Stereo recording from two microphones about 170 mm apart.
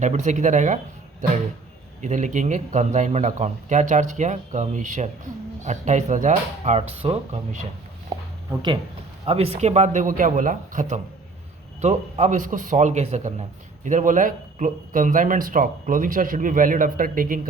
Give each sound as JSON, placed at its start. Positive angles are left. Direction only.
{"t": 0.0, "sound": "a man's voice", "side_deg": -45}
{"t": 2.0, "sound": "a man's voice", "side_deg": -45}
{"t": 9.2, "sound": "a man's voice", "side_deg": -35}